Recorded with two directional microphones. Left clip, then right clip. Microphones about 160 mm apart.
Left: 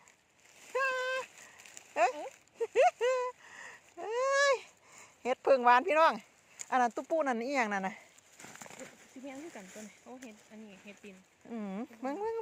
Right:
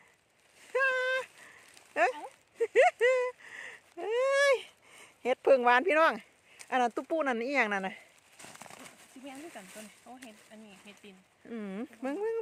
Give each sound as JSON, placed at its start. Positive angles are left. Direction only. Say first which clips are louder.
{"t": 0.7, "sound": "boat", "louder": "right 4 dB", "side_deg": -25}
{"t": 1.7, "sound": "a sound", "louder": "right 1 dB", "side_deg": -20}
{"t": 6.7, "sound": "speech", "louder": "even", "side_deg": -30}
{"t": 8.4, "sound": "crumpling", "louder": "even", "side_deg": -35}
{"t": 9.6, "sound": "speech", "louder": "right 1 dB", "side_deg": -40}
{"t": 10.5, "sound": "speech", "louder": "even", "side_deg": -55}
{"t": 11.4, "sound": "speech", "louder": "right 1 dB", "side_deg": -25}